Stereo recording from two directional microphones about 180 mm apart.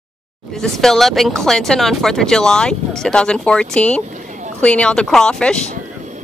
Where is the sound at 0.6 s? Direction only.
Centre (ahead or behind).